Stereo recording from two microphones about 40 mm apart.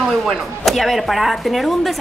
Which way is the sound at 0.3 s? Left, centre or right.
Centre.